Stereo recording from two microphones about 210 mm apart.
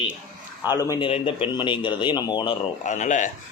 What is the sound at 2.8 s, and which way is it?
Speech, 35° left (ahead or behind).